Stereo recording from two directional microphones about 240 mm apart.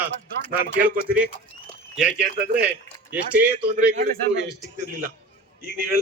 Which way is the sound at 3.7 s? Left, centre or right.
Right.